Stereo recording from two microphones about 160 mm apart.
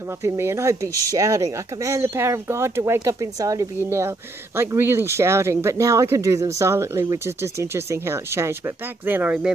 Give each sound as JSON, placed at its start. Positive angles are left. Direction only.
{"t": 0.2, "sound": "speech", "side_deg": -15}